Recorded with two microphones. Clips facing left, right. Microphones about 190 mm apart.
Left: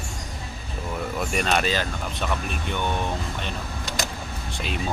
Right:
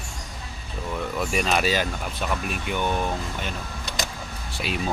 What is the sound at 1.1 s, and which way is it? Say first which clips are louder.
Speech: even; centre (ahead or behind).